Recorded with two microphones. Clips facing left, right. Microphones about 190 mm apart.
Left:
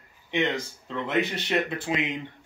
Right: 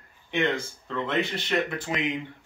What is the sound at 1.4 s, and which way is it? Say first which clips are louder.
Speech: left 1 dB; 20° left (ahead or behind).